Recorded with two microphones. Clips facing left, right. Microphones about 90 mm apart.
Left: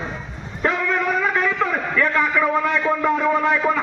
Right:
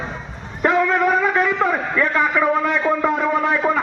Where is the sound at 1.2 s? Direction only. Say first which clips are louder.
Right 2 dB; 20° right (ahead or behind).